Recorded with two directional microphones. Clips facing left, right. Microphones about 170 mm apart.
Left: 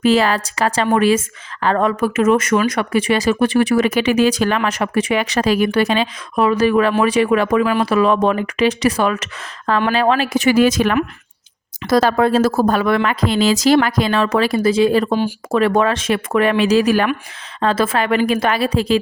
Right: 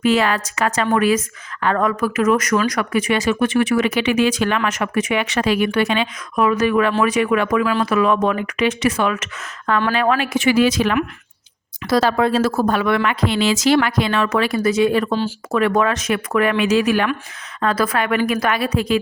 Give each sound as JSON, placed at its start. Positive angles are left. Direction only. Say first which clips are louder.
{"t": 0.0, "sound": "speech", "louder": "left 2 dB", "side_deg": 35}
{"t": 7.6, "sound": "speech", "louder": "left 2 dB", "side_deg": 15}
{"t": 7.9, "sound": "speech", "louder": "left 2 dB", "side_deg": 30}